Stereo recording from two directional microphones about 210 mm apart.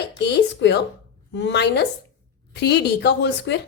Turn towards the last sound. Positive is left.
turn(degrees=55)  # may be behind; listen again after turning